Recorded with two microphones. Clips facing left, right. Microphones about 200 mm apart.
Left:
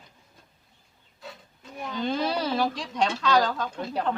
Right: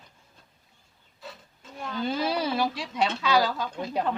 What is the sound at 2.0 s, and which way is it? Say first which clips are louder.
Speech: even; 5° right (ahead or behind).